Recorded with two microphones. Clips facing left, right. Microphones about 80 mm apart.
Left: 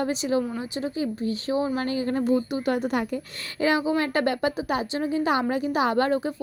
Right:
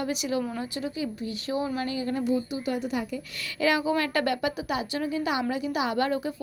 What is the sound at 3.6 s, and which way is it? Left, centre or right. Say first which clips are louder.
Speech: left 2 dB; left.